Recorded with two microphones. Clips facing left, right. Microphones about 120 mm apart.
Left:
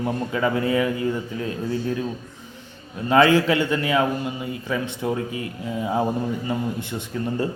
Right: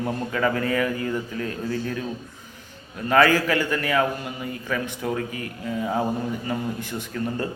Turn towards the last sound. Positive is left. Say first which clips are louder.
# left 2 dB
turn(degrees=20)  # may be behind; listen again after turning